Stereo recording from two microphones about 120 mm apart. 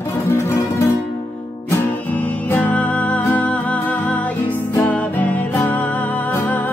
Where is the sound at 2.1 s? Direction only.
15° left (ahead or behind).